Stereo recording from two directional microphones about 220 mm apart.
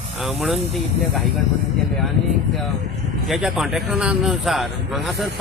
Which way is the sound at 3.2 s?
Centre (ahead or behind).